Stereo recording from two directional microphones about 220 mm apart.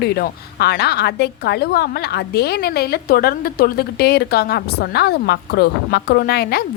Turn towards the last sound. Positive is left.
turn(degrees=45)  # may be behind; listen again after turning